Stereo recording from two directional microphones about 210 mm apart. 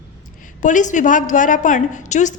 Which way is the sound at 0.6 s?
35° left (ahead or behind).